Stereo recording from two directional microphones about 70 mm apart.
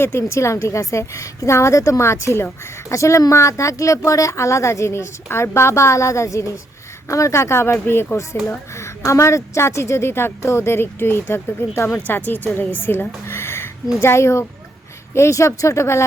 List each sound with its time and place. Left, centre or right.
0.0 s a woman's voice: left
11.9 s a woman's voice: left
13.2 s a sound: left
14.0 s a woman's voice: left